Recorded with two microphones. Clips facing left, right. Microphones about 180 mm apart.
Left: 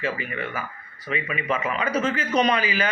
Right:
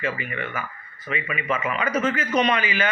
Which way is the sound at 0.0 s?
35° left (ahead or behind).